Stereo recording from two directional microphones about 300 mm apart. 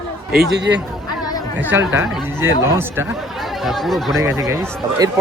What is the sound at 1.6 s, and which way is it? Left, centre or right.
Speech, centre.